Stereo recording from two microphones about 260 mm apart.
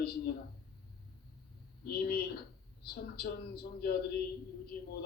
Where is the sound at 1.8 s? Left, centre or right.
Left.